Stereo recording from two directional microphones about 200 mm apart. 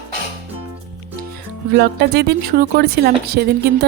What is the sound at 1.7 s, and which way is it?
A woman's voice, 55° right (ahead or behind).